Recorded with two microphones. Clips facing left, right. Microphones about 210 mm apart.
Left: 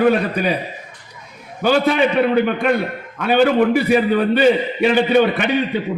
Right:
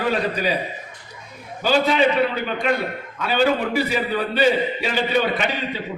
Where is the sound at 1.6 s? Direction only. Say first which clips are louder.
Left 3 dB; 55° left (ahead or behind).